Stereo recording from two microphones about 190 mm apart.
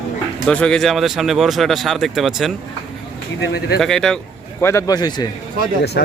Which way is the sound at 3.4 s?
65° left (ahead or behind).